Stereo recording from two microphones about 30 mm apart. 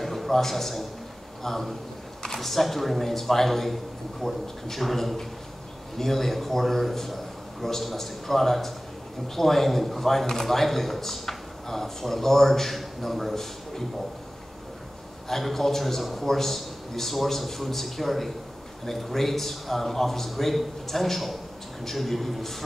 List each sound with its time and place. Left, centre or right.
0.0 s a man's voice: centre
15.2 s a man's voice: centre